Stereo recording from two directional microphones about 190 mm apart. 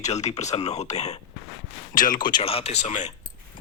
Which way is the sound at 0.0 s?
35° left (ahead or behind).